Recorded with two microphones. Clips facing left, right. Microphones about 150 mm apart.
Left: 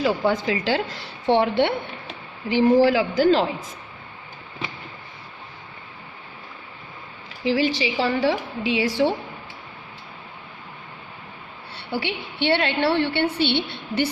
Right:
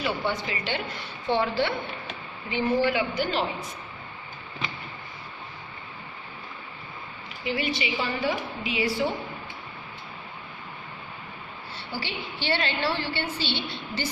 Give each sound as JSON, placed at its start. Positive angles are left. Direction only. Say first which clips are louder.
{"t": 0.0, "sound": "a woman's voice", "louder": "left 7 dB", "side_deg": 90}
{"t": 2.5, "sound": "a woman's voice", "louder": "left 8 dB", "side_deg": 90}
{"t": 7.4, "sound": "a woman's voice", "louder": "left 7 dB", "side_deg": 90}
{"t": 11.9, "sound": "a woman's voice", "louder": "left 7 dB", "side_deg": 65}